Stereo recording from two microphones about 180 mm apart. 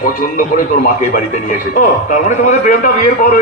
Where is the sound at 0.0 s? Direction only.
50° left (ahead or behind).